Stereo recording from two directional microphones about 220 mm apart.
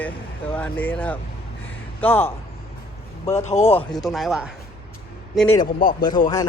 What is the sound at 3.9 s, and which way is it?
A man's voice, centre (ahead or behind).